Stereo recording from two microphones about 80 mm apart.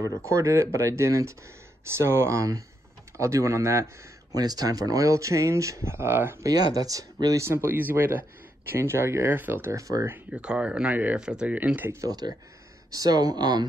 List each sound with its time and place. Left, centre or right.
0.2 s speech: right
4.4 s speech: right
6.4 s speech: right
7.3 s speech: right
9.8 s speech: right
10.3 s speech: centre
11.9 s speech: right